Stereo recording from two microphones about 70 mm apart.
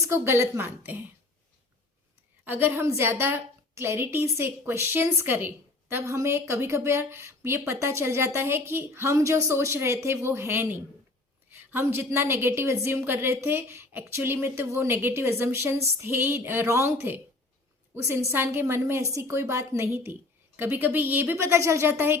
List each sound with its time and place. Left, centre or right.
0.0 s a woman's voice: right
2.4 s a woman's voice: right
20.6 s a woman's voice: right